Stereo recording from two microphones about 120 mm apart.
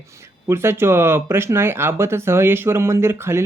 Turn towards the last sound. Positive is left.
turn(degrees=-20)  # may be behind; listen again after turning